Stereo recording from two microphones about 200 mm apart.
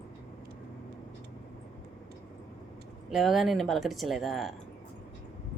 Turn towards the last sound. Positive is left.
turn(degrees=0)  # may be behind; listen again after turning